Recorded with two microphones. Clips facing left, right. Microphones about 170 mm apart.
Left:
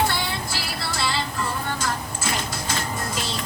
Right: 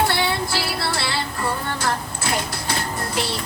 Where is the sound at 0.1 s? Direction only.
65° right (ahead or behind).